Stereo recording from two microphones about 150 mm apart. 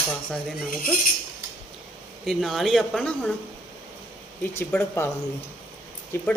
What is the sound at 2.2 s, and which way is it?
Speech, centre (ahead or behind).